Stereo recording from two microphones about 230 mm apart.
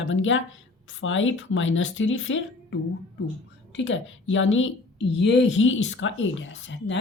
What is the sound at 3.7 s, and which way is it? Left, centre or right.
Speech, left.